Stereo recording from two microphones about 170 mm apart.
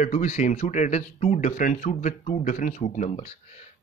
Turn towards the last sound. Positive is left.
turn(degrees=40)  # may be behind; listen again after turning